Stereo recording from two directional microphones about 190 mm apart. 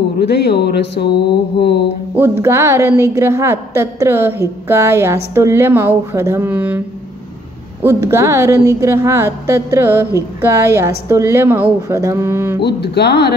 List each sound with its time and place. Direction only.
0.2 s speech: 60° left (ahead or behind)
2.1 s a woman's voice: 10° right (ahead or behind)
7.8 s a woman's voice: 15° right (ahead or behind)
12.5 s speech: 60° left (ahead or behind)